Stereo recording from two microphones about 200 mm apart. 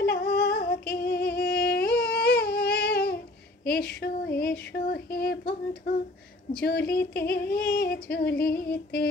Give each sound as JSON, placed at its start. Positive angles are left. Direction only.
{"t": 0.0, "sound": "singing", "side_deg": 50}
{"t": 2.1, "sound": "humming", "side_deg": 50}
{"t": 3.6, "sound": "a sound", "side_deg": 50}
{"t": 6.6, "sound": "female singing", "side_deg": 50}